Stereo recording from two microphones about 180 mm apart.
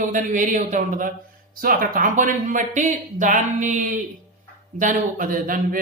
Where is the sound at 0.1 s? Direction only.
45° right (ahead or behind).